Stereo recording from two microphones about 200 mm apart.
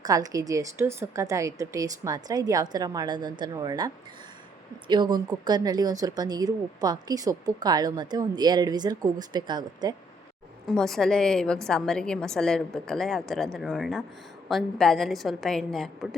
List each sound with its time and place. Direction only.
0.0 s a woman's voice: 20° right (ahead or behind)
10.7 s a woman's voice: centre (ahead or behind)